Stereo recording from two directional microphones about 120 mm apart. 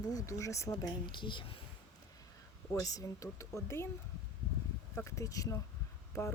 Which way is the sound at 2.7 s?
30° left (ahead or behind).